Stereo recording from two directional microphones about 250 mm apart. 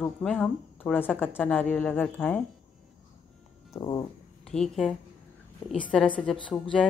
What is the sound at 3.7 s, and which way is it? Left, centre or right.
Speech, centre.